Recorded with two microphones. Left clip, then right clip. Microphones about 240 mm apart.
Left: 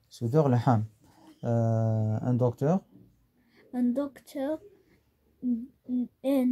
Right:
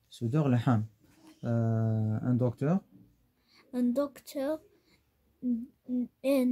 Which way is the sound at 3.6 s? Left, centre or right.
Right.